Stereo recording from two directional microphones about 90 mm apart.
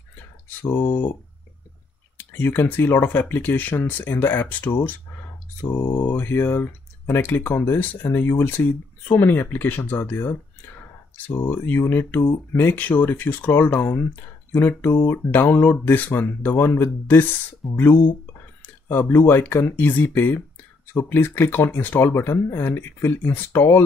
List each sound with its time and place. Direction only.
2.1 s speech: 20° left (ahead or behind)
17.6 s speech: centre (ahead or behind)
18.6 s speech: 25° left (ahead or behind)